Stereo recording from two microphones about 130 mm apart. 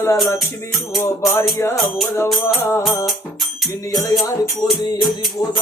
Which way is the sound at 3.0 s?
Centre (ahead or behind).